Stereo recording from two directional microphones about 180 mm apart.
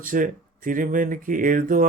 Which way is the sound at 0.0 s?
50° right (ahead or behind).